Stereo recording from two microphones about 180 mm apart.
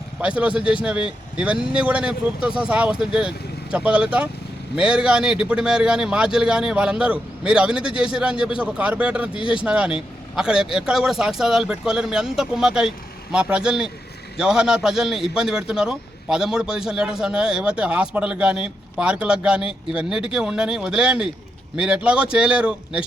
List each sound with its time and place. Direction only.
0.2 s a man's voice: 5° right (ahead or behind)
9.4 s speech: 30° left (ahead or behind)
9.6 s a man's voice: 5° right (ahead or behind)